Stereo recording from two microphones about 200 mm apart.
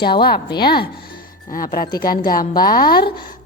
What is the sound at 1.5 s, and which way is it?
A woman's voice, 45° left (ahead or behind).